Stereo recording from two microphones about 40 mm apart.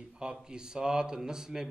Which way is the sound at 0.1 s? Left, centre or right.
Right.